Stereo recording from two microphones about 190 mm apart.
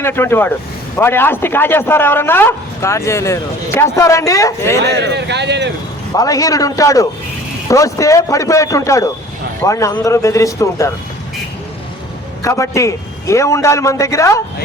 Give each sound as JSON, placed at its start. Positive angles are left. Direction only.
{"t": 0.0, "sound": "a man's voice", "side_deg": 10}
{"t": 4.9, "sound": "speech", "side_deg": -65}
{"t": 6.1, "sound": "a man's voice", "side_deg": 20}
{"t": 12.4, "sound": "a man's voice", "side_deg": 15}